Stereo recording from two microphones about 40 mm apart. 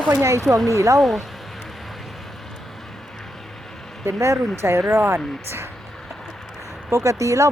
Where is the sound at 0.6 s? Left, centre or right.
Centre.